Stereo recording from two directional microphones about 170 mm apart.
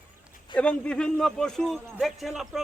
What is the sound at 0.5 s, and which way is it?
A man's voice, 5° left (ahead or behind).